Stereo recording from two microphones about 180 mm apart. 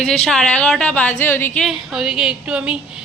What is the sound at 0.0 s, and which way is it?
A woman's voice, 5° left (ahead or behind).